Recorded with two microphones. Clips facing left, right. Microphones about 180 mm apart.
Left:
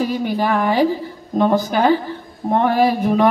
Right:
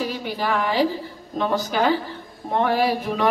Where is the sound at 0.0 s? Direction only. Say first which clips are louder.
Left 7 dB; 50° left (ahead or behind).